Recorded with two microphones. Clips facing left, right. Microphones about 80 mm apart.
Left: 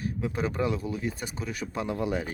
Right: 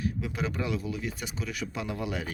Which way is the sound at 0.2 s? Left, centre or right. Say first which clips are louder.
Left 4 dB; left.